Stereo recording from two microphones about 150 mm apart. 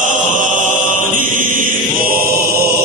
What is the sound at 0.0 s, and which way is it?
Chant, 60° right (ahead or behind).